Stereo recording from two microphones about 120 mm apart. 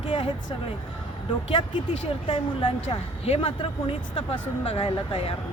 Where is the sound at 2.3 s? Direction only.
50° left (ahead or behind).